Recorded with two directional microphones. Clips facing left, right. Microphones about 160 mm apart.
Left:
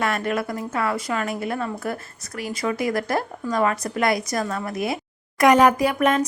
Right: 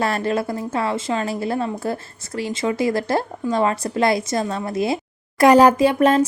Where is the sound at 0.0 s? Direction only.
30° right (ahead or behind).